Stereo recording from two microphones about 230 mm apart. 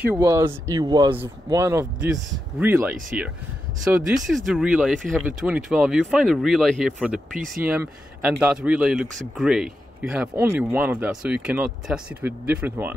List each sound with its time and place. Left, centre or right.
0.0 s speech: centre